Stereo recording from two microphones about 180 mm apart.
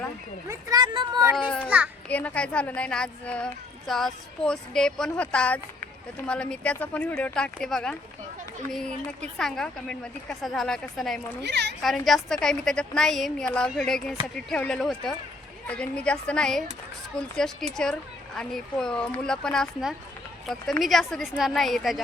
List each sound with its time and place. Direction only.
0.4 s speech: 20° right (ahead or behind)
1.7 s a child's voice: 10° right (ahead or behind)
2.0 s speech: 10° left (ahead or behind)
11.4 s a woman's voice: 70° right (ahead or behind)
11.8 s speech: centre (ahead or behind)